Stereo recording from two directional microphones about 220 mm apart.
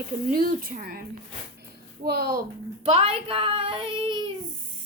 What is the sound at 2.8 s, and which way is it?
Speech, 25° right (ahead or behind).